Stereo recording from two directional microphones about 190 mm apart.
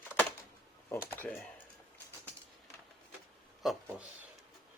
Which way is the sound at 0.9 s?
10° left (ahead or behind).